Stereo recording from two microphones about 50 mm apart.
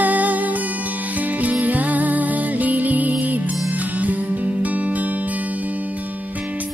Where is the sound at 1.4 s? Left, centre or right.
Right.